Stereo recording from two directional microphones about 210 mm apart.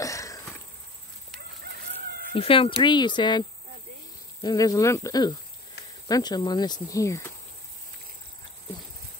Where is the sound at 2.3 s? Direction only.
25° left (ahead or behind).